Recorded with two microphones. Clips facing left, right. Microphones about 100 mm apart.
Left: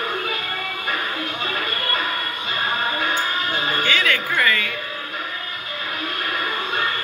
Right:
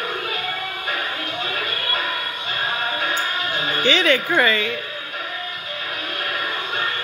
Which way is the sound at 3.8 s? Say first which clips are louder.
Right 7 dB; 20° right (ahead or behind).